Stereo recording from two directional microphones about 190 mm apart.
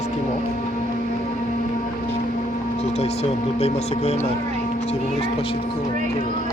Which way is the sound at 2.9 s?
35° left (ahead or behind).